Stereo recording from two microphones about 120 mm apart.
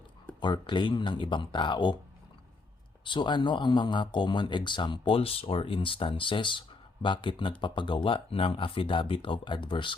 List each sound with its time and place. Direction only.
0.3 s speech: 40° left (ahead or behind)
3.0 s speech: 40° left (ahead or behind)